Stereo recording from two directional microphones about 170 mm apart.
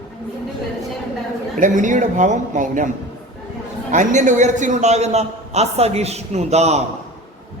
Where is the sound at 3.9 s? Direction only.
45° right (ahead or behind).